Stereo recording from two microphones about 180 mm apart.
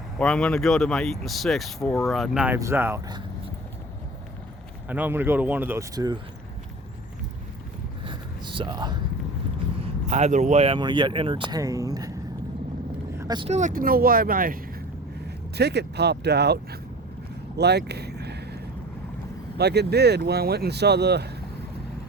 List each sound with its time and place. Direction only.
0.2 s speech: 5° left (ahead or behind); by 3.0 s 15° right (ahead or behind)
4.9 s speech: 10° right (ahead or behind)
8.0 s a sound: 25° right (ahead or behind)
10.1 s speech: 40° right (ahead or behind); by 12.1 s 20° right (ahead or behind)
13.1 s vehicle: 20° right (ahead or behind)
13.5 s speech: 45° right (ahead or behind)
15.5 s speech: 65° right (ahead or behind)
17.6 s a sound: 70° right (ahead or behind)
19.5 s speech: 65° right (ahead or behind)